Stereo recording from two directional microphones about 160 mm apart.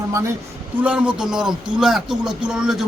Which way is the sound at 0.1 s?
20° right (ahead or behind).